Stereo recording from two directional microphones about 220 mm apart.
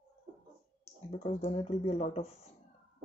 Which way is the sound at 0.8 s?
30° left (ahead or behind).